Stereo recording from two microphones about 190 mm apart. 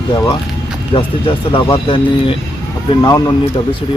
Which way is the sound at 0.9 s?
30° left (ahead or behind).